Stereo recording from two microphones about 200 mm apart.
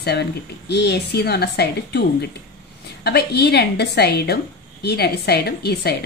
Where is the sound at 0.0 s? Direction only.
55° left (ahead or behind).